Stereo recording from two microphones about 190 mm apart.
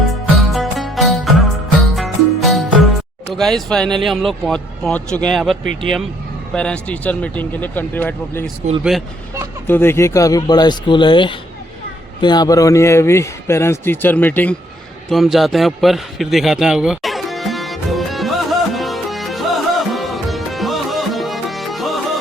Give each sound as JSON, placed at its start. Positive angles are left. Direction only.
{"t": 0.1, "sound": "music", "side_deg": 0}
{"t": 3.3, "sound": "a man's voice", "side_deg": 0}
{"t": 8.8, "sound": "speech", "side_deg": 0}
{"t": 9.6, "sound": "a man's voice", "side_deg": 10}
{"t": 15.1, "sound": "a sound", "side_deg": 0}